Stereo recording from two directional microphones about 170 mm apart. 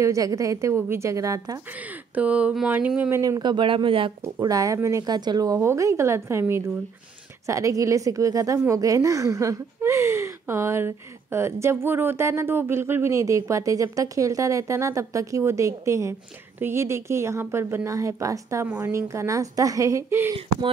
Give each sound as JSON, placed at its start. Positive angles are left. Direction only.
{"t": 0.0, "sound": "a woman's voice", "side_deg": -20}
{"t": 3.2, "sound": "speech", "side_deg": -25}
{"t": 4.2, "sound": "a woman's voice", "side_deg": -20}